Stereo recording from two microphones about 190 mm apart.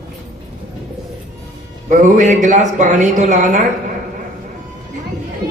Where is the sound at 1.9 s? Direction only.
40° right (ahead or behind).